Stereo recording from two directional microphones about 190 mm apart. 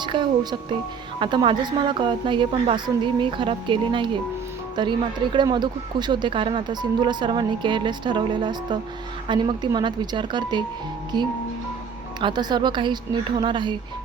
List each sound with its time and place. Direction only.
0.0 s music: 25° right (ahead or behind)
1.2 s speech: 25° right (ahead or behind)